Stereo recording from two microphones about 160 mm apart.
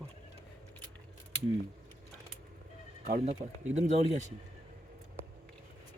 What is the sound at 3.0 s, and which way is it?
Speech, 50° right (ahead or behind).